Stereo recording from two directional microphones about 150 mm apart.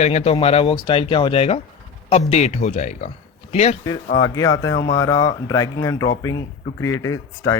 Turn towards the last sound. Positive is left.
turn(degrees=25)  # may be behind; listen again after turning